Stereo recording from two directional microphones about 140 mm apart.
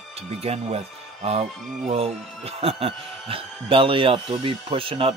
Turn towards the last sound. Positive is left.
turn(degrees=-40)  # may be behind; listen again after turning